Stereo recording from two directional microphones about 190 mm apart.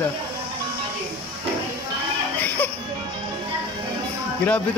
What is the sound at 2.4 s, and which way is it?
Music, 10° left (ahead or behind).